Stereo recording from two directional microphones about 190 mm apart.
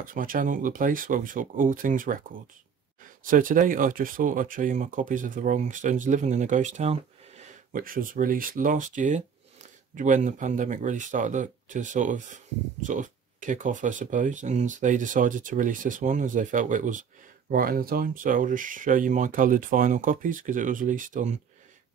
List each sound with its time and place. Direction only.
0.0 s speech: 45° right (ahead or behind)